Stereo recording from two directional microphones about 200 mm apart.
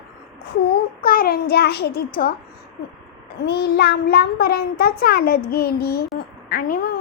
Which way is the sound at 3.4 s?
55° left (ahead or behind).